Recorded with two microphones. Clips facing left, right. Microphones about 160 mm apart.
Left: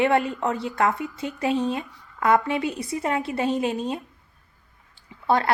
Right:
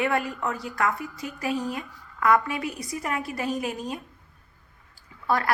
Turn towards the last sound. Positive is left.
turn(degrees=25)  # may be behind; listen again after turning